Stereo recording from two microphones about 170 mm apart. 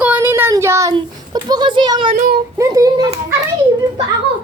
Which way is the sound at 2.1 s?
55° right (ahead or behind).